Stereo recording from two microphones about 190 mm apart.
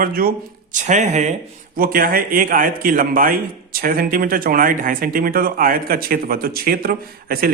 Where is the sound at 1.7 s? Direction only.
50° right (ahead or behind).